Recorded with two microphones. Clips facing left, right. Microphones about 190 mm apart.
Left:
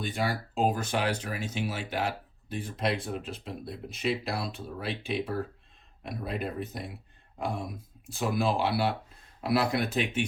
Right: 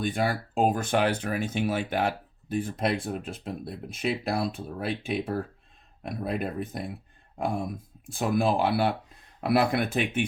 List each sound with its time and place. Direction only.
0.0 s speech: 50° right (ahead or behind)
8.1 s speech: 50° right (ahead or behind)